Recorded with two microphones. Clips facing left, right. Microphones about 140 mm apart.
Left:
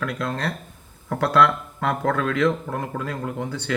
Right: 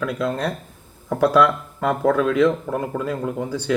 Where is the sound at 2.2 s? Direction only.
20° right (ahead or behind).